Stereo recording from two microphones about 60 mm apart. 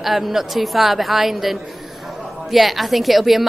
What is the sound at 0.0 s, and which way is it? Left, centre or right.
A woman's voice, centre.